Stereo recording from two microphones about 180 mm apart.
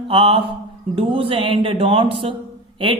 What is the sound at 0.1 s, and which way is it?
A woman's voice, 30° right (ahead or behind).